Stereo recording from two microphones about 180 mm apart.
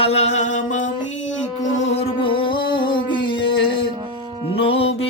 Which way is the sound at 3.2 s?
85° left.